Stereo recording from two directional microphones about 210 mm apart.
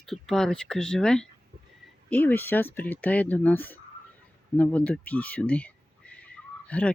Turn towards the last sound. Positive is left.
turn(degrees=5)  # may be behind; listen again after turning